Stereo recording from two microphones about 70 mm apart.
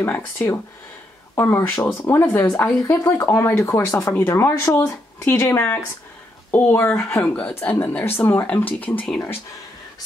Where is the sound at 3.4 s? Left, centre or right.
Left.